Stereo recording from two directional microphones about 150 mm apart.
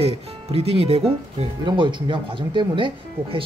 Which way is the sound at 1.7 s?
30° right (ahead or behind).